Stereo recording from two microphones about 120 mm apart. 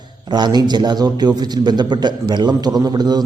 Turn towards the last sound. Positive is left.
turn(degrees=-35)  # may be behind; listen again after turning